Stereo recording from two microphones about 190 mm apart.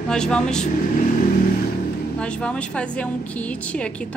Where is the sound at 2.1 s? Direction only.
5° left (ahead or behind).